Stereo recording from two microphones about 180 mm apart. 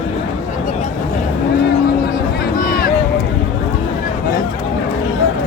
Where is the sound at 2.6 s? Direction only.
55° left (ahead or behind).